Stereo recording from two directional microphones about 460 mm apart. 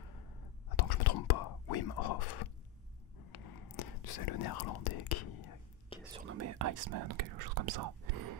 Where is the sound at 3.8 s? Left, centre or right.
Left.